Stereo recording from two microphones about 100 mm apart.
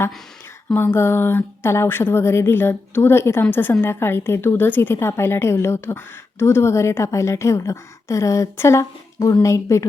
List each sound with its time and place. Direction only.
0.7 s a woman's voice: 20° left (ahead or behind)